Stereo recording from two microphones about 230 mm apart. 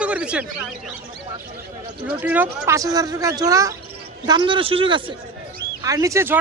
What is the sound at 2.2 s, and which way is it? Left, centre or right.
A man's voice, centre.